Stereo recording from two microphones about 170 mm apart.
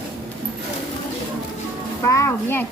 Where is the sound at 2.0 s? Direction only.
20° left (ahead or behind).